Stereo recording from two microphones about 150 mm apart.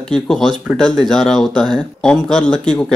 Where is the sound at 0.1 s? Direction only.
5° left (ahead or behind).